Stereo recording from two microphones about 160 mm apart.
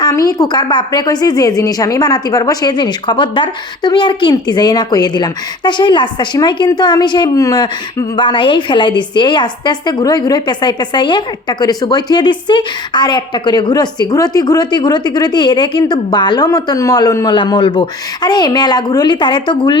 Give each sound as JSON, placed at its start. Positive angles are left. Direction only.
{"t": 0.0, "sound": "a woman's voice", "side_deg": 20}